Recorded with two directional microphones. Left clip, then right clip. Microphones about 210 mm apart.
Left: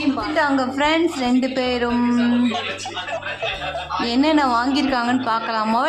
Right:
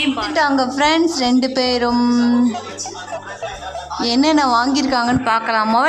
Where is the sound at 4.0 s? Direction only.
5° right (ahead or behind).